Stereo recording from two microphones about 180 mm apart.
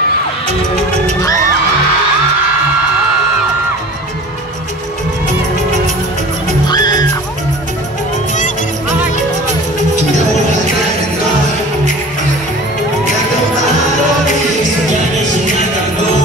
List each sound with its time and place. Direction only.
6.7 s music: 25° left (ahead or behind)